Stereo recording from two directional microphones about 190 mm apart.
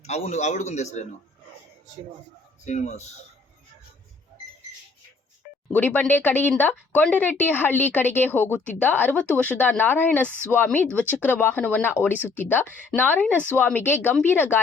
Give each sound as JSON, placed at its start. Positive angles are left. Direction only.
{"t": 0.0, "sound": "a man's voice", "side_deg": 35}
{"t": 2.6, "sound": "a man's voice", "side_deg": 35}
{"t": 5.7, "sound": "speech", "side_deg": 10}